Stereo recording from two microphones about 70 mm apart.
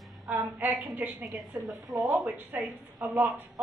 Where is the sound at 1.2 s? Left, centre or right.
Centre.